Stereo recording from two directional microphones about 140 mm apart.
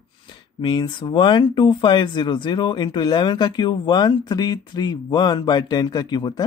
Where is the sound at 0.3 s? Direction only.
35° left (ahead or behind).